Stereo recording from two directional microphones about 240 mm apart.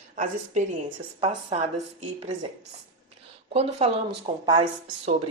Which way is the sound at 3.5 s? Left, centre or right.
Right.